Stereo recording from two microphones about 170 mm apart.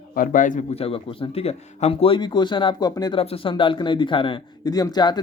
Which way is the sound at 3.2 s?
35° left (ahead or behind).